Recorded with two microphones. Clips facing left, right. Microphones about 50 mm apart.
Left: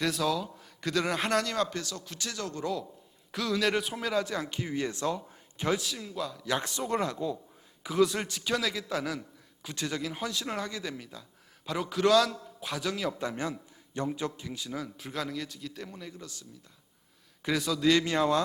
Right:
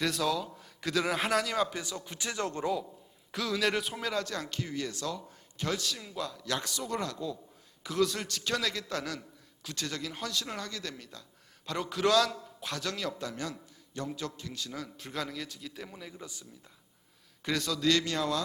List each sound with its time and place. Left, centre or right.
0.0 s a man's voice: centre; by 2.6 s right
3.3 s speech: centre
6.0 s a man's voice: centre
6.6 s speech: left
7.9 s speech: centre
13.1 s a man's voice: left; by 16.2 s centre
17.4 s speech: centre; by 18.3 s left